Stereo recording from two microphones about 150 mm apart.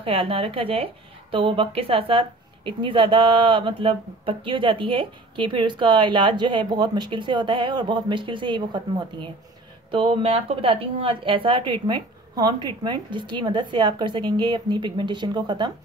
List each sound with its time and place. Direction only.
0.0 s a woman's voice: 40° right (ahead or behind)